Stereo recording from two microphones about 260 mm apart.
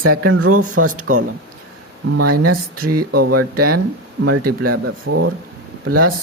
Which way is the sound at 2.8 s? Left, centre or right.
Right.